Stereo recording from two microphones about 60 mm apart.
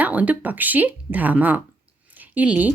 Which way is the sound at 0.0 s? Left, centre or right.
Right.